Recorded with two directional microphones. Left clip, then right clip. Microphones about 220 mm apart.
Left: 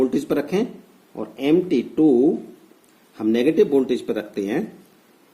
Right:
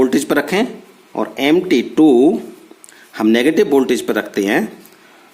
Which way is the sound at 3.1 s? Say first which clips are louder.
Right 5 dB; 30° right (ahead or behind).